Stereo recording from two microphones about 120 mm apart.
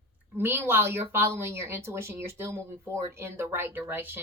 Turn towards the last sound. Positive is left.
turn(degrees=-20)  # may be behind; listen again after turning